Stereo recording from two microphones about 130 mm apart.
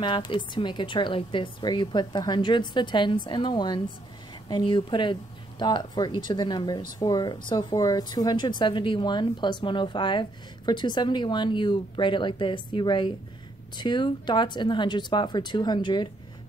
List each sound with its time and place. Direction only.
0.0 s speech: 40° left (ahead or behind)